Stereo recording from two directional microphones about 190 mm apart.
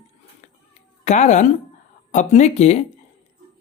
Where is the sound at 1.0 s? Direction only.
35° left (ahead or behind).